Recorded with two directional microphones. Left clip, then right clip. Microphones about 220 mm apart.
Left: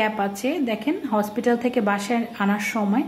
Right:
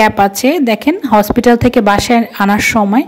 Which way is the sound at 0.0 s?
40° right (ahead or behind).